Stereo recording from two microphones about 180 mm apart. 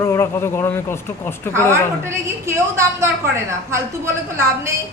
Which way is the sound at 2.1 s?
15° right (ahead or behind).